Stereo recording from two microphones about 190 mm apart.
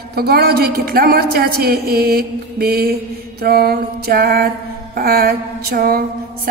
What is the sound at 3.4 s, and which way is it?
Mantra, 55° right (ahead or behind).